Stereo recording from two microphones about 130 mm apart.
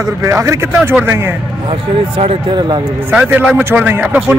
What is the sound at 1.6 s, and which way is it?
Speech, 50° right (ahead or behind).